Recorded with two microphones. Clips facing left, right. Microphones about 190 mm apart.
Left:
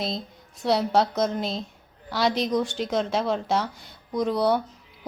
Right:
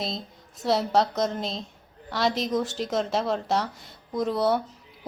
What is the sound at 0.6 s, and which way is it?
A woman's voice, centre (ahead or behind).